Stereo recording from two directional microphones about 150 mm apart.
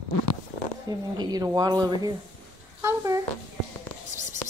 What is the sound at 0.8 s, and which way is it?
A woman's voice, 25° right (ahead or behind).